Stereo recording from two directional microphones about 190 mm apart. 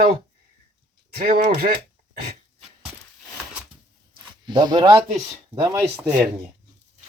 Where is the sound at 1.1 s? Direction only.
50° right (ahead or behind).